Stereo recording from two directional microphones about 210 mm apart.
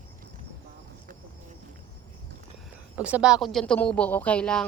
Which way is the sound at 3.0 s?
5° right (ahead or behind).